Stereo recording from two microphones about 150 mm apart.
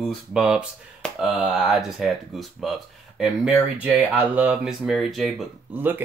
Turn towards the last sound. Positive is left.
turn(degrees=-15)  # may be behind; listen again after turning